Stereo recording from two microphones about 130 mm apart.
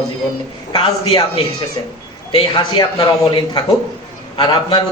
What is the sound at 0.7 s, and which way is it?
Speech, 40° left (ahead or behind).